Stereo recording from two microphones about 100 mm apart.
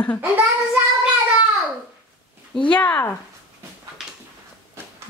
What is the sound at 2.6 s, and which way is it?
Speech, 15° left (ahead or behind).